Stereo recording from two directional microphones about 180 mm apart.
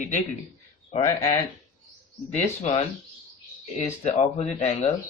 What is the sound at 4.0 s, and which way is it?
Speech, 35° left (ahead or behind).